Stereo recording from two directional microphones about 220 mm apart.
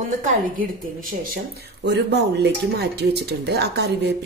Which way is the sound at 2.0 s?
50° right (ahead or behind).